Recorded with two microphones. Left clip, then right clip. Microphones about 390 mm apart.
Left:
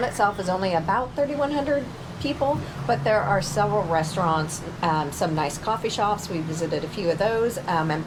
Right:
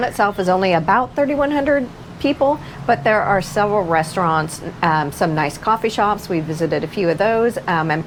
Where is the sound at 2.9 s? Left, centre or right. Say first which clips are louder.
Right 6 dB; right.